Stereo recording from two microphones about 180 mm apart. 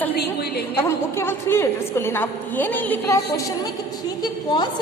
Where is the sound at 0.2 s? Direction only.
60° left (ahead or behind).